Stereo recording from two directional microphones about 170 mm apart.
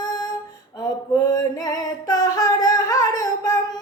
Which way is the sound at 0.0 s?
20° left (ahead or behind).